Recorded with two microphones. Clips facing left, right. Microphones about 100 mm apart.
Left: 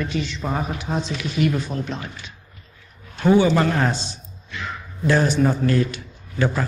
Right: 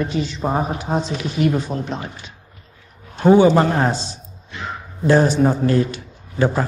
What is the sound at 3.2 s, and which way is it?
A man's voice, 35° right (ahead or behind).